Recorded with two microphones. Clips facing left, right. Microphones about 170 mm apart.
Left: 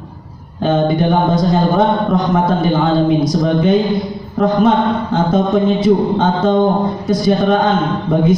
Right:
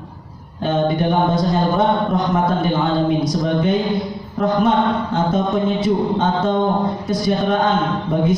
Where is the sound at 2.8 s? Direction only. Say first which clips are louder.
Left 4 dB; 90° left.